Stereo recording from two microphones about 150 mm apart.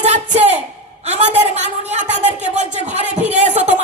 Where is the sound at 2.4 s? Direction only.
50° right (ahead or behind).